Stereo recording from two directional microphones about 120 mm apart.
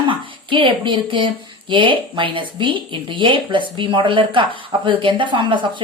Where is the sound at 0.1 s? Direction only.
45° right (ahead or behind).